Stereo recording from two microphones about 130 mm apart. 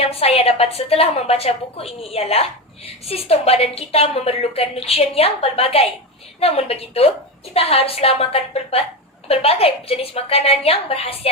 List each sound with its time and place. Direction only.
0.0 s a woman's voice: 50° left (ahead or behind)